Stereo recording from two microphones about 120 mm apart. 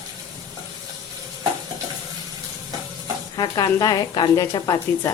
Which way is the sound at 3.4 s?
30° left (ahead or behind).